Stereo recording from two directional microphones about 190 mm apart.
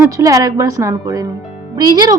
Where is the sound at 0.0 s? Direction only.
15° right (ahead or behind).